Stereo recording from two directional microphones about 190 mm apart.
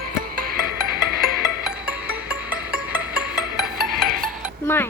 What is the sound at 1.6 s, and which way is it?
Music, 5° right (ahead or behind).